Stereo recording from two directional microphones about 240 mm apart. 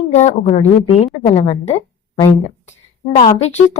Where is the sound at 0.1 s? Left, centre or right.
Left.